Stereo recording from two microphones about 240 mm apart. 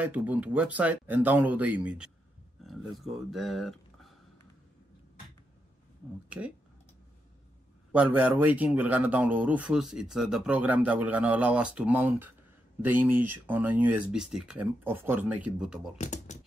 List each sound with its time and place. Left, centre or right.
0.0 s speech: centre
6.2 s speech: centre
7.9 s speech: centre
16.0 s speech: left